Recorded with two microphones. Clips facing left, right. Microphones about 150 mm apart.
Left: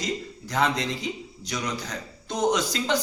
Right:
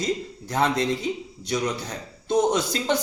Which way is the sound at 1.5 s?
30° right (ahead or behind).